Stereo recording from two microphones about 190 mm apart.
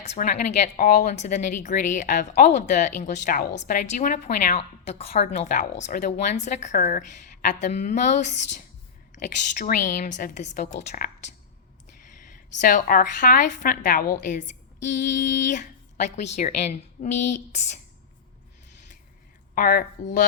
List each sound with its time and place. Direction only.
0.0 s a woman's voice: 35° left (ahead or behind)
12.2 s a woman's voice: 45° left (ahead or behind)
19.5 s a woman's voice: 45° left (ahead or behind)